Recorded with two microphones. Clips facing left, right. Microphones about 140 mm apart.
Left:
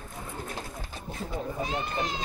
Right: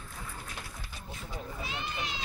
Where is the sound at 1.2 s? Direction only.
40° left (ahead or behind).